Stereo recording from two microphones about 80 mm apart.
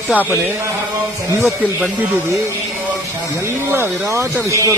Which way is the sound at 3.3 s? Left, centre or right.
Right.